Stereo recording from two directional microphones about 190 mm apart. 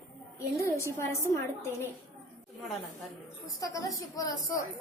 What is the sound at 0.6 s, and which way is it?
Speech, 15° left (ahead or behind).